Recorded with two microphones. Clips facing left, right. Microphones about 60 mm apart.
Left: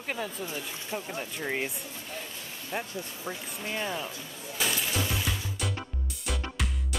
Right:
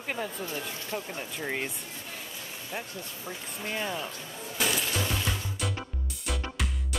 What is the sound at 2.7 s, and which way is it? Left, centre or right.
Speech, centre.